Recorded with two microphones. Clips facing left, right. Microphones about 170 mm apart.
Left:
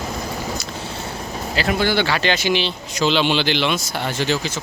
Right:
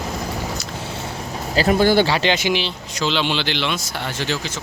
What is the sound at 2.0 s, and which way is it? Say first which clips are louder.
Speech: right 1 dB; 25° right (ahead or behind).